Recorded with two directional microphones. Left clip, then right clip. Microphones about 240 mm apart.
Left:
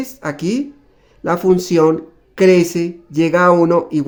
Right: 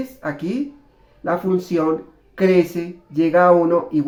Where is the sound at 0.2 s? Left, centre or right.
Left.